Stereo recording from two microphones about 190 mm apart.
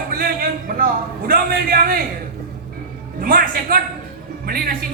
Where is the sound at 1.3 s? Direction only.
50° right (ahead or behind).